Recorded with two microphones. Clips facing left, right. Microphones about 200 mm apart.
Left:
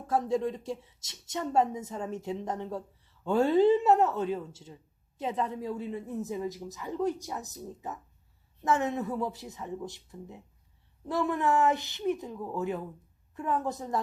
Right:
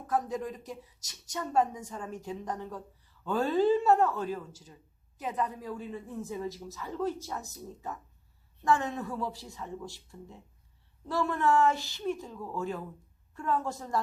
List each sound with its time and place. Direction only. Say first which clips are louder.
0.1 s a woman's voice: left 4 dB; 25° left (ahead or behind)